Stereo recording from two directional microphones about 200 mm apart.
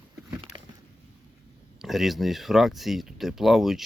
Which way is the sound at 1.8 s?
Centre (ahead or behind).